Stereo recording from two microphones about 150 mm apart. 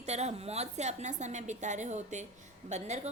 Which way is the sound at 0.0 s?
45° right (ahead or behind).